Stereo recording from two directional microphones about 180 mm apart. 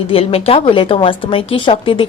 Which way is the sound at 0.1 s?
35° left (ahead or behind).